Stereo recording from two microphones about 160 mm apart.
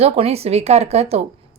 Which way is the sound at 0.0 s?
40° right (ahead or behind).